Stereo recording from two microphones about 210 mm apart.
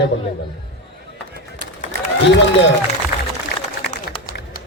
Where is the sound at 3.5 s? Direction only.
50° left (ahead or behind).